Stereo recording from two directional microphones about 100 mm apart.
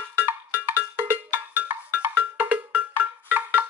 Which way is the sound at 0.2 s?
20° right (ahead or behind).